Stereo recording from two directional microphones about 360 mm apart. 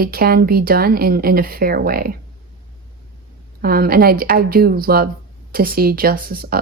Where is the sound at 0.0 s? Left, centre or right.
Right.